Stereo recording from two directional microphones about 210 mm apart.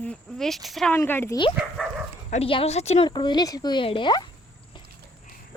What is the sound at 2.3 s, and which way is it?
A woman's voice, 25° left (ahead or behind).